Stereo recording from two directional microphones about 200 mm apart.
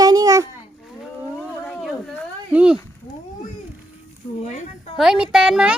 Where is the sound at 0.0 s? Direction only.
20° right (ahead or behind).